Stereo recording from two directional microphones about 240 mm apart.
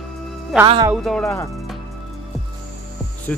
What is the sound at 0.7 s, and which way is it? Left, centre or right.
Speech, centre.